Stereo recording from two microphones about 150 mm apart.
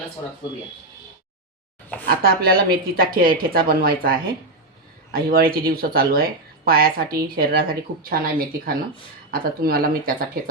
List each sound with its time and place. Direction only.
2.0 s speech: 85° right